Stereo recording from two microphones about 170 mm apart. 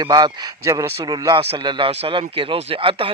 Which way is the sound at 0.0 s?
25° right (ahead or behind).